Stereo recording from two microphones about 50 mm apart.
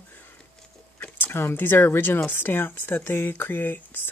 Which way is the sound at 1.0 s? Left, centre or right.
Left.